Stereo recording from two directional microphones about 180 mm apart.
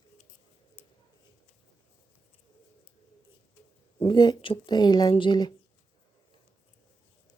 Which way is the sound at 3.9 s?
25° left (ahead or behind).